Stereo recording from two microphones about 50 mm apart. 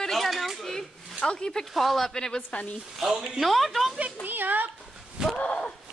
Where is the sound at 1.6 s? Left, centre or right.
Centre.